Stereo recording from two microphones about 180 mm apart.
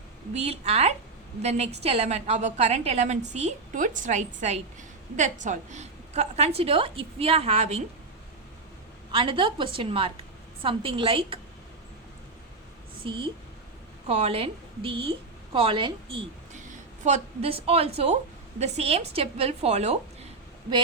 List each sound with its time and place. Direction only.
0.3 s a woman's voice: 35° right (ahead or behind)
9.1 s a woman's voice: 30° right (ahead or behind)
13.0 s a woman's voice: 30° right (ahead or behind)
16.6 s a woman's voice: 45° right (ahead or behind)